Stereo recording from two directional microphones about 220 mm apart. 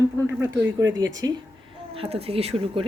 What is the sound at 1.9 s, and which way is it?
Speech, 25° right (ahead or behind).